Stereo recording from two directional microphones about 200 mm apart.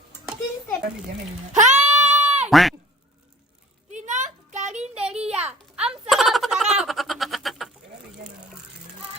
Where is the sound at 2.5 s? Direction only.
Centre (ahead or behind).